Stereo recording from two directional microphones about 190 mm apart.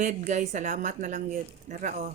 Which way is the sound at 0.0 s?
40° right (ahead or behind).